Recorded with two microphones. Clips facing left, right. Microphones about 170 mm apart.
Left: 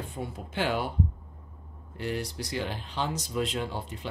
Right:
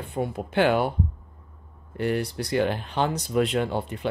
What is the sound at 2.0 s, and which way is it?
Speech, 60° right (ahead or behind).